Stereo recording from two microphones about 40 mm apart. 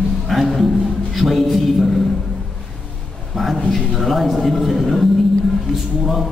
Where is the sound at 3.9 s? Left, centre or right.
Centre.